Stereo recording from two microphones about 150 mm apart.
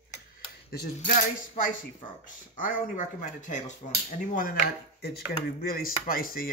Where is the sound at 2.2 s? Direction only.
60° left (ahead or behind).